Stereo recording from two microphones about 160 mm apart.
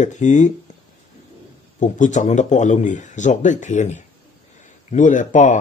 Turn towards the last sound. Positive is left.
turn(degrees=50)  # may be behind; listen again after turning